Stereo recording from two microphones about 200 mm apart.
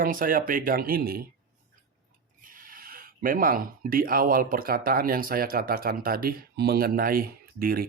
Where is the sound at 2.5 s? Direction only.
45° right (ahead or behind).